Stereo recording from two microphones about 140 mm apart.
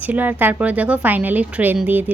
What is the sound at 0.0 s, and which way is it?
A woman's voice, 10° right (ahead or behind).